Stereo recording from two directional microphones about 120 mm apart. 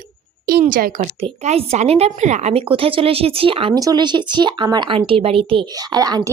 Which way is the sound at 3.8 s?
35° right (ahead or behind).